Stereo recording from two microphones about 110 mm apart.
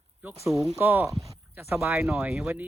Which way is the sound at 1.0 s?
Centre (ahead or behind).